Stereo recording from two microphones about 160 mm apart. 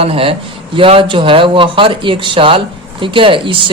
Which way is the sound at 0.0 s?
35° right (ahead or behind).